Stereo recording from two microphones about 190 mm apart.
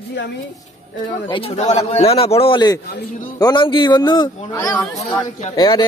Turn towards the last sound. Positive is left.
turn(degrees=20)  # may be behind; listen again after turning